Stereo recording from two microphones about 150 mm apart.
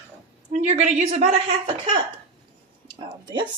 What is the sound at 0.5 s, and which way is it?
A woman's voice, 50° right (ahead or behind).